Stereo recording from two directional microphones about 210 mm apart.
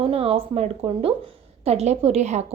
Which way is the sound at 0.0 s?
25° right (ahead or behind).